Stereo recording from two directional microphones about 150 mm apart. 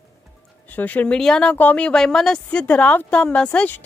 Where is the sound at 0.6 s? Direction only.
10° left (ahead or behind).